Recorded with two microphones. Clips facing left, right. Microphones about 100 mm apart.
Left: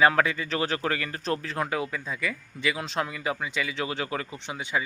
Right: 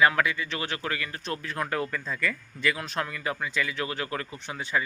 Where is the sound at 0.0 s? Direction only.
30° left (ahead or behind).